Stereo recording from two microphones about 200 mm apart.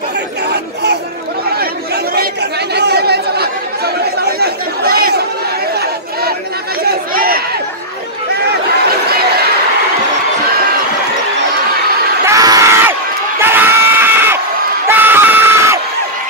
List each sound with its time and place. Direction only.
2.7 s chatter: 55° right (ahead or behind)
6.8 s chatter: 50° right (ahead or behind)
12.3 s crowd: 15° right (ahead or behind)